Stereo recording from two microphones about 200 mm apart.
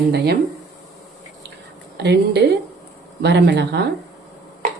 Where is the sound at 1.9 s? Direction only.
55° right (ahead or behind).